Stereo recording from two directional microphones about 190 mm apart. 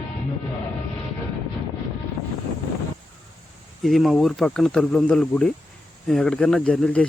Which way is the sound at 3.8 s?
Centre (ahead or behind).